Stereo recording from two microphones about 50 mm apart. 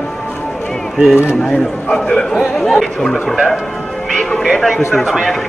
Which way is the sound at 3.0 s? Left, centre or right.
Centre.